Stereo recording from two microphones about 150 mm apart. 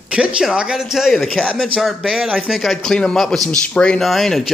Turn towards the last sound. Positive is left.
turn(degrees=0)  # may be behind; listen again after turning